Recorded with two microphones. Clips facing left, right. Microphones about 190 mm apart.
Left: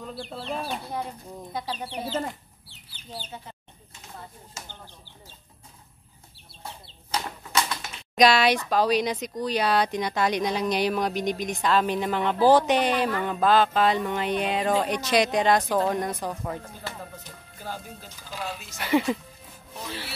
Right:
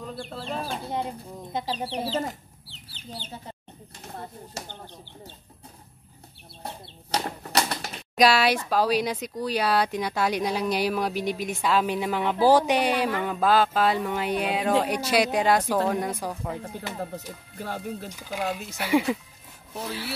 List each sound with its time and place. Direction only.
0.4 s speech: centre (ahead or behind)
0.8 s speech: 25° right (ahead or behind)
6.6 s bird flight: 35° right (ahead or behind)
8.2 s speech: 5° right (ahead or behind)
17.6 s speech: 65° right (ahead or behind)
18.8 s speech: 10° right (ahead or behind)